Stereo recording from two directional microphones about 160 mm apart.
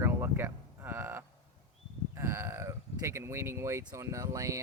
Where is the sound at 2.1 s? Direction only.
15° right (ahead or behind).